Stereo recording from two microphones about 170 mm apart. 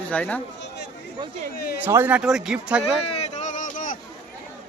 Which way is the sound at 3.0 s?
35° left (ahead or behind).